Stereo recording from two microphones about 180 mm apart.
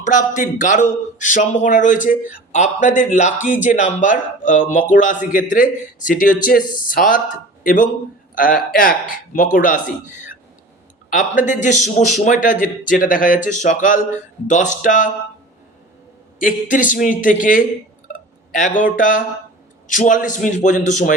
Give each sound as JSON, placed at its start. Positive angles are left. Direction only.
{"t": 0.0, "sound": "a man's voice", "side_deg": 45}
{"t": 11.1, "sound": "a man's voice", "side_deg": 45}
{"t": 16.6, "sound": "a man's voice", "side_deg": 45}
{"t": 18.1, "sound": "a sound", "side_deg": 50}
{"t": 18.9, "sound": "a man's voice", "side_deg": 45}